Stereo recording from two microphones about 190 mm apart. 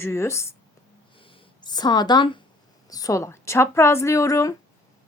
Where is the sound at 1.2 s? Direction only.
25° left (ahead or behind).